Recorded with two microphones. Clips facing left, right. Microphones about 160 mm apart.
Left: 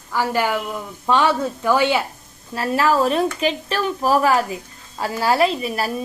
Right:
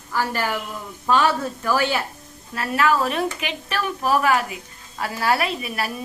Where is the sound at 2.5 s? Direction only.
35° left (ahead or behind).